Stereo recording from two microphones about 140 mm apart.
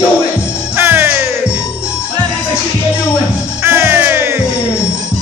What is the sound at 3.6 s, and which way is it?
Music, 15° right (ahead or behind).